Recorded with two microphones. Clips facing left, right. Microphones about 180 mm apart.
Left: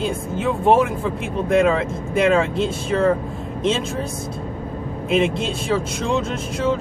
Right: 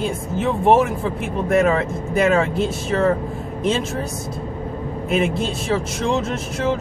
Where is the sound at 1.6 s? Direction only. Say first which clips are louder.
Even; 5° right (ahead or behind).